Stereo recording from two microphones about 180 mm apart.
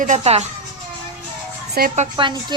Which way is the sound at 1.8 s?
55° right (ahead or behind).